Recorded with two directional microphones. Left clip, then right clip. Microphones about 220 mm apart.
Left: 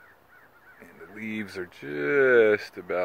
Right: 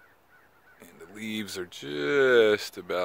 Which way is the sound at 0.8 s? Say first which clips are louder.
Left 1 dB; 15° right (ahead or behind).